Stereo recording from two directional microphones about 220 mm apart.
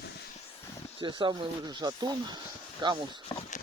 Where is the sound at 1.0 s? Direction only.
20° right (ahead or behind).